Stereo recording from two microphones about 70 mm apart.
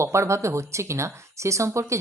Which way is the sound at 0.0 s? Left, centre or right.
Right.